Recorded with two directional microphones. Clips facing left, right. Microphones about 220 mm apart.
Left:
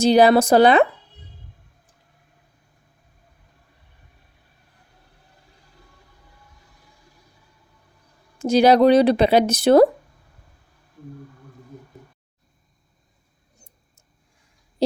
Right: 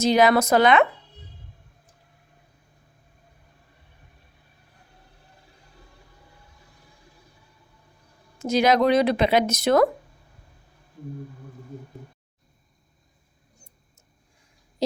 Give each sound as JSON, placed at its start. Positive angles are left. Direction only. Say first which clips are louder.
{"t": 0.0, "sound": "speech", "louder": "left 4 dB", "side_deg": 30}
{"t": 8.4, "sound": "speech", "louder": "left 5 dB", "side_deg": 30}
{"t": 14.8, "sound": "a sound", "louder": "left 5 dB", "side_deg": 30}